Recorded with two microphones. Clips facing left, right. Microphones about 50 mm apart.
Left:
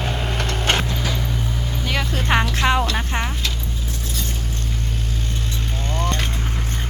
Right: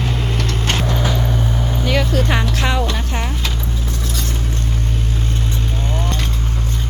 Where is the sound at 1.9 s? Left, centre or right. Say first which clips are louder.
Right 6 dB; centre.